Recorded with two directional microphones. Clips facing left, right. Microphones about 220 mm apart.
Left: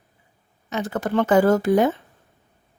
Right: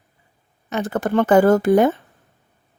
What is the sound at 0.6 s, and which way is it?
Speech, 55° right (ahead or behind).